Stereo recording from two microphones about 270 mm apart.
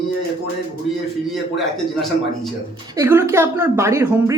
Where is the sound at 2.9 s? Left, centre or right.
Centre.